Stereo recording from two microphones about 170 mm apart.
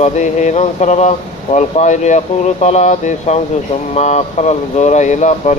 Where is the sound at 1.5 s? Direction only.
45° left (ahead or behind).